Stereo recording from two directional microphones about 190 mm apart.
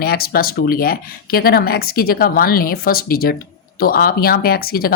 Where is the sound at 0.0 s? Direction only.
55° left (ahead or behind).